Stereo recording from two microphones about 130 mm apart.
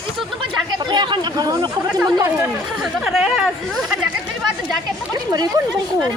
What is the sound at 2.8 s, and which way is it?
Speech, 5° right (ahead or behind).